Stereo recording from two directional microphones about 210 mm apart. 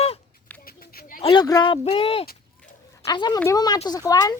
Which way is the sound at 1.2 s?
20° left (ahead or behind).